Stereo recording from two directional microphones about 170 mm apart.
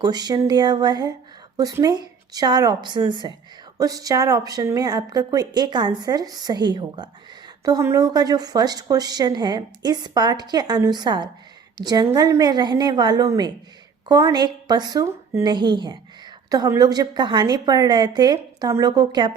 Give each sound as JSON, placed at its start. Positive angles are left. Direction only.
{"t": 0.0, "sound": "a woman's voice", "side_deg": -25}